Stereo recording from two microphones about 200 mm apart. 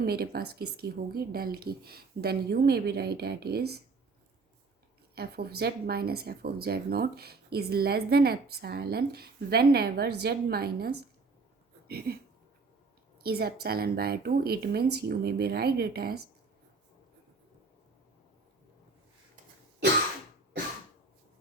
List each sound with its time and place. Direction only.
0.0 s speech: 50° right (ahead or behind)
5.1 s speech: 50° right (ahead or behind)
13.2 s speech: 50° right (ahead or behind)